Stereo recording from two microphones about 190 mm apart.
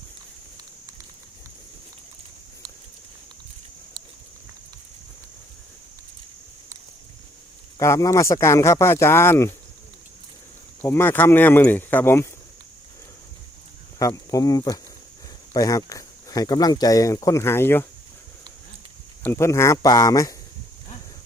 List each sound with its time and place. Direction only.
7.8 s speech: 15° left (ahead or behind)
10.8 s speech: 10° left (ahead or behind)
14.0 s speech: 15° left (ahead or behind)
19.2 s speech: 15° left (ahead or behind)